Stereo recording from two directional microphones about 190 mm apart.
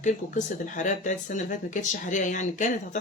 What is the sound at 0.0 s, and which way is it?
Speech, 40° left (ahead or behind).